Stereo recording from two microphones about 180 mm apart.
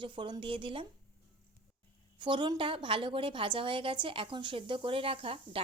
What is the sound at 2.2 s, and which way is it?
A woman's voice, 25° right (ahead or behind).